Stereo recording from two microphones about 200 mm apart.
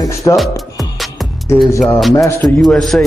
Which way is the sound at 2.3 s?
10° left (ahead or behind).